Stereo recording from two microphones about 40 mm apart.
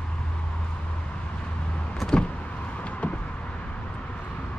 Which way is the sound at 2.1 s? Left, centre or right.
Left.